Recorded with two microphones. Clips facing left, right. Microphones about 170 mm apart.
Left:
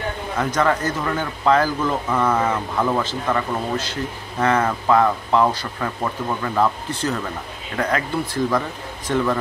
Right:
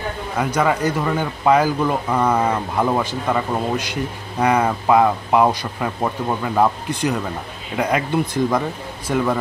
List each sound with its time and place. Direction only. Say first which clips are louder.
0.4 s speech: right 1 dB; 10° right (ahead or behind)